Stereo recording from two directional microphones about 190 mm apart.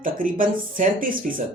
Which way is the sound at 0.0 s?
45° right (ahead or behind).